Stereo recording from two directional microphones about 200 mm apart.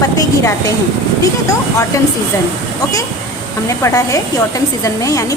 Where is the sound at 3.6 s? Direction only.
15° left (ahead or behind).